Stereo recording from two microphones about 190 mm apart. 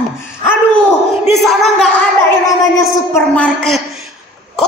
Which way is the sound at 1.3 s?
Centre (ahead or behind).